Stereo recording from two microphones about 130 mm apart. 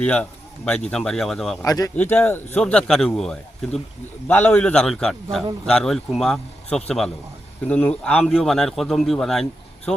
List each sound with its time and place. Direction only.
0.0 s a man's voice: 10° left (ahead or behind)
1.6 s speech: 25° left (ahead or behind)
2.0 s a man's voice: 15° left (ahead or behind)
4.3 s a man's voice: 15° left (ahead or behind)